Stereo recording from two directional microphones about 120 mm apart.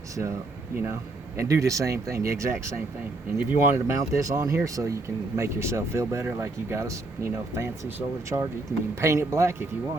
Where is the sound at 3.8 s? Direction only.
25° right (ahead or behind).